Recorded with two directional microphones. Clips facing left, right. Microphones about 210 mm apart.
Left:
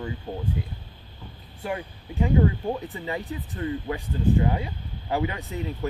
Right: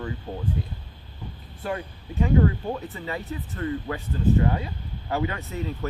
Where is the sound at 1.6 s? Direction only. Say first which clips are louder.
Even; 15° left (ahead or behind).